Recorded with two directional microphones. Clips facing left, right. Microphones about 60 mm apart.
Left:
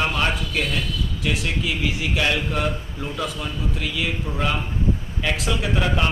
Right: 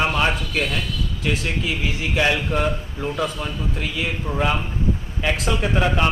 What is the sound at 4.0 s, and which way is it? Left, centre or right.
Speech, centre.